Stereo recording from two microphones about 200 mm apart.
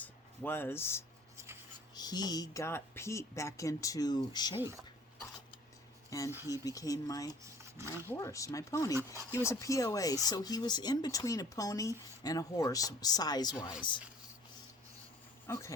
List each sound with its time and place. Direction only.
0.0 s speech: 10° left (ahead or behind)
6.1 s speech: 15° left (ahead or behind)
15.4 s dog: 15° left (ahead or behind)